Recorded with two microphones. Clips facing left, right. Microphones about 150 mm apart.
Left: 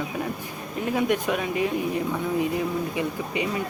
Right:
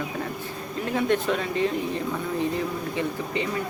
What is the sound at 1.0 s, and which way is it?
Speech, 10° left (ahead or behind).